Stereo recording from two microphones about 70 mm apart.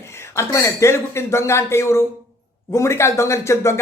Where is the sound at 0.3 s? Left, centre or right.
Left.